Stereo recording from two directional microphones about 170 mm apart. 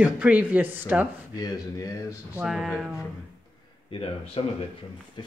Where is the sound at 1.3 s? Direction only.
20° left (ahead or behind).